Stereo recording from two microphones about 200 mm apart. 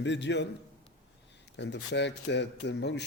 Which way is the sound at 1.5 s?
60° left (ahead or behind).